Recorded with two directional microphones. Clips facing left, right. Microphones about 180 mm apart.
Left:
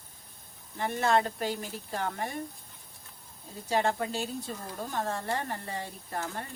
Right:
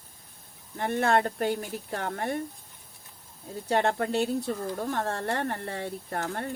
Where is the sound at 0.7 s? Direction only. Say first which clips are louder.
Right 2 dB; 55° right (ahead or behind).